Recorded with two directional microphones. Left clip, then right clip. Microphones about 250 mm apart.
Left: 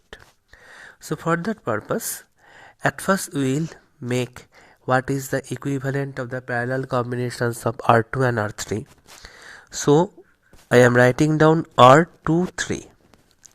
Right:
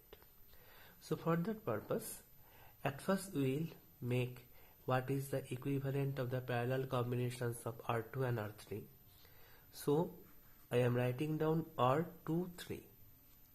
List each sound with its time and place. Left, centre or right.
0.6 s speech: left
6.7 s speech: left
9.8 s speech: left